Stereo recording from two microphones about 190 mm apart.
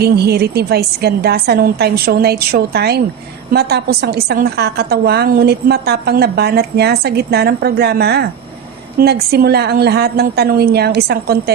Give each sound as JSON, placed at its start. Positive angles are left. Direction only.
{"t": 0.0, "sound": "a woman's voice", "side_deg": -55}